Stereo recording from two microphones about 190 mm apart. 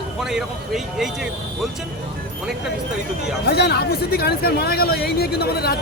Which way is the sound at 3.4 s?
60° left (ahead or behind).